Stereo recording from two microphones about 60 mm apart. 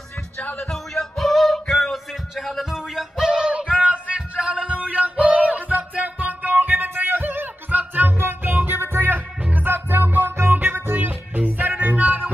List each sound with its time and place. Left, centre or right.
0.4 s music: left
0.7 s music: centre; by 9.2 s right
9.4 s music: right